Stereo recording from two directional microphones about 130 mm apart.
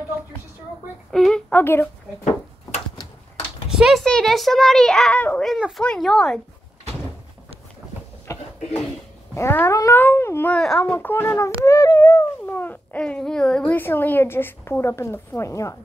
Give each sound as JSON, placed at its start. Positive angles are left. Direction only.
{"t": 1.1, "sound": "a woman's voice", "side_deg": 5}
{"t": 3.7, "sound": "a child's voice", "side_deg": 0}
{"t": 8.3, "sound": "a sound", "side_deg": 25}
{"t": 10.9, "sound": "speech", "side_deg": 15}
{"t": 12.4, "sound": "speech", "side_deg": 15}